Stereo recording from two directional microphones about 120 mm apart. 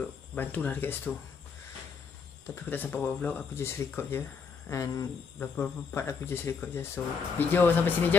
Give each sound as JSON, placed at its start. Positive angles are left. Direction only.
{"t": 0.0, "sound": "speech", "side_deg": 10}
{"t": 2.5, "sound": "speech", "side_deg": 15}